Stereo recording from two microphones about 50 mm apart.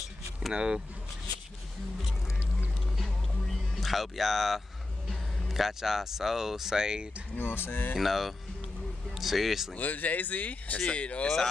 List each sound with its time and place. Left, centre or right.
0.5 s speech: centre
3.0 s music: centre
5.5 s speech: centre
7.3 s speech: left
8.0 s speech: centre
9.8 s speech: left